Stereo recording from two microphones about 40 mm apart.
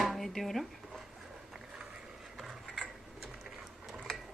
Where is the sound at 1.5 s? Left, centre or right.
Centre.